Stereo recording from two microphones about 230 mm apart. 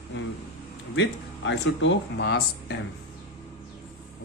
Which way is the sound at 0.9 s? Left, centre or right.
Left.